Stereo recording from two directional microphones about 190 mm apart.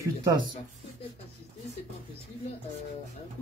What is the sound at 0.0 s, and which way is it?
Speech, 20° right (ahead or behind).